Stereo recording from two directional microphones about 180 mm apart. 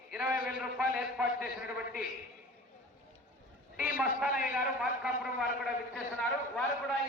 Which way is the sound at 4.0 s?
5° right (ahead or behind).